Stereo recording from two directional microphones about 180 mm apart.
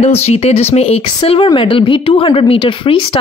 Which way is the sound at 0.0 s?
35° left (ahead or behind).